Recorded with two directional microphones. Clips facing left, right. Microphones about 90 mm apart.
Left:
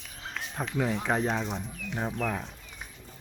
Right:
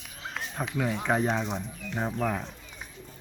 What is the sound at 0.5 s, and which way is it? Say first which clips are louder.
Speech: left 1 dB; centre (ahead or behind).